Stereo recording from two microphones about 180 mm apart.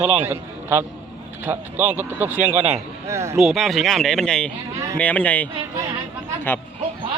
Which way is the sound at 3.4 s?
Centre (ahead or behind).